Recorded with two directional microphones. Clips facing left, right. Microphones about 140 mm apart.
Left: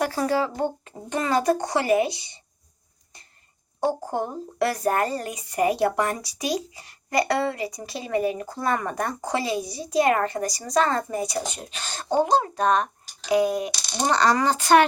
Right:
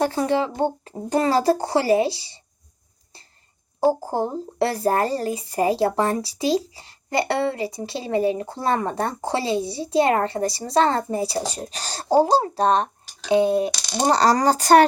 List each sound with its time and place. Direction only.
0.0 s speech: 25° right (ahead or behind)
3.8 s speech: 30° right (ahead or behind)